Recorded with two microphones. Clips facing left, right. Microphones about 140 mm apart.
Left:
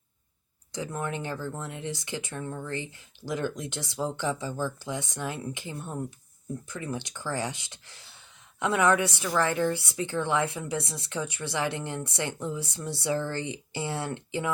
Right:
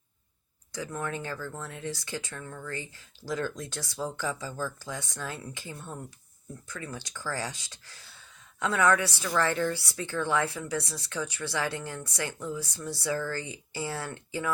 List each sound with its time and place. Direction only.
0.7 s speech: 25° left (ahead or behind)